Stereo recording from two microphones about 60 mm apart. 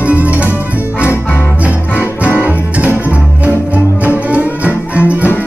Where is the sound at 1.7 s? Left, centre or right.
Right.